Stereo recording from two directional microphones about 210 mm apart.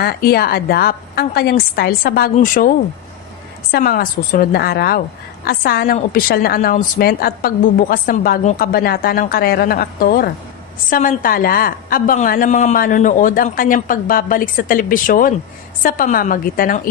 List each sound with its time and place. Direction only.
0.0 s a woman's voice: 45° left (ahead or behind)